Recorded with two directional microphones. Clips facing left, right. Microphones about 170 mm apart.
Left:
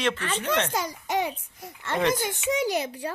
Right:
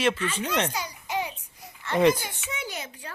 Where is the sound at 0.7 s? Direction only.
50° left (ahead or behind).